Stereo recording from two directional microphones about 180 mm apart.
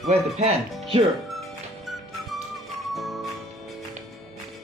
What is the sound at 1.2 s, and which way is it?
Music, centre (ahead or behind).